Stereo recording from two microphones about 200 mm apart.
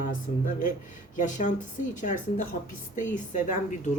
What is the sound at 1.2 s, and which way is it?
Speech, 40° left (ahead or behind).